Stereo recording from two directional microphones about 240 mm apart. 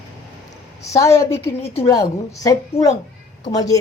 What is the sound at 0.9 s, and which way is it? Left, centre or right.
A woman's voice, centre.